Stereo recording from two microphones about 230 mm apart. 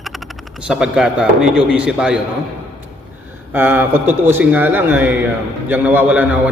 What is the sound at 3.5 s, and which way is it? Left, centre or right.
A man's voice, centre.